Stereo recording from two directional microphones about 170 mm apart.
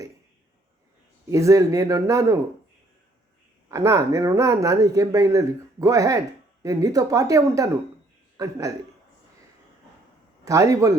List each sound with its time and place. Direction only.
1.3 s speech: 20° right (ahead or behind)
3.7 s speech: 20° right (ahead or behind)
10.4 s speech: 20° right (ahead or behind)